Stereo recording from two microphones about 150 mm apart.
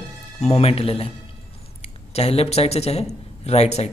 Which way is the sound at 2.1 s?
40° left (ahead or behind).